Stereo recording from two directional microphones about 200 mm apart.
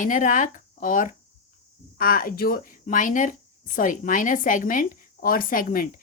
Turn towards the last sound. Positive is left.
turn(degrees=45)  # may be behind; listen again after turning